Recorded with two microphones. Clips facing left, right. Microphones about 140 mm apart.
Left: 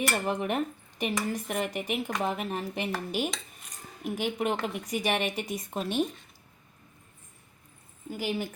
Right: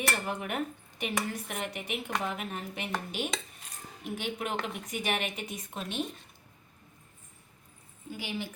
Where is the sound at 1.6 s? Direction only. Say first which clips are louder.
Left 6 dB; 40° left (ahead or behind).